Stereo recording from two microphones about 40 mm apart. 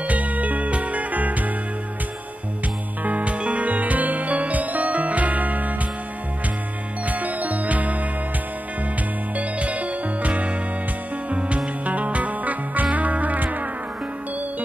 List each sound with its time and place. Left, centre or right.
0.0 s music: right
3.0 s music: right
7.1 s music: right
9.4 s music: right